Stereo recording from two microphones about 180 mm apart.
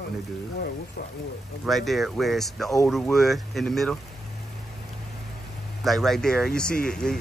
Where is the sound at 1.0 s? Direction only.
55° left (ahead or behind).